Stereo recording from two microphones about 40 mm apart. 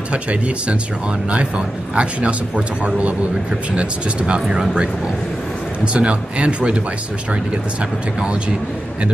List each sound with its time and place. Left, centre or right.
0.1 s speech: right
2.0 s speech: right
5.9 s speech: right
8.2 s speech: right